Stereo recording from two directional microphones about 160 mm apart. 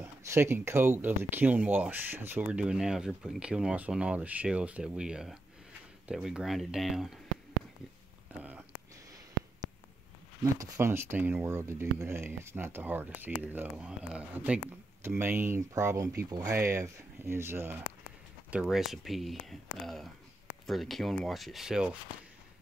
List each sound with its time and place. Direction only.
0.0 s speech: 15° right (ahead or behind)
8.3 s speech: 10° right (ahead or behind)
10.6 s speech: 15° right (ahead or behind)